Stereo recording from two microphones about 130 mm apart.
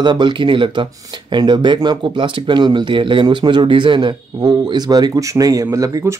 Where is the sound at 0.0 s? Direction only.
35° right (ahead or behind).